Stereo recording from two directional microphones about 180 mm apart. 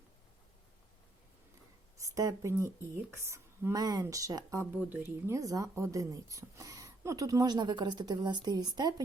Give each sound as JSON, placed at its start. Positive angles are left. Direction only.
{"t": 2.0, "sound": "speech", "side_deg": -20}